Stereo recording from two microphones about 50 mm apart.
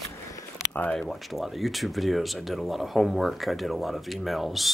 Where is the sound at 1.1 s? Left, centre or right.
Centre.